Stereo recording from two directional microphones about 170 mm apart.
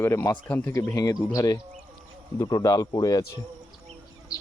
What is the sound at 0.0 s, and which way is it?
Speech, 15° left (ahead or behind).